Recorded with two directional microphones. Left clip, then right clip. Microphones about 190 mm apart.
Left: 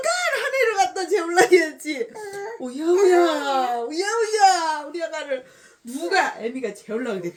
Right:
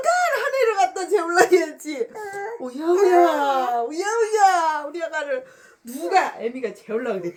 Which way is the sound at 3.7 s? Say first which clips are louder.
Right 1 dB; 15° left (ahead or behind).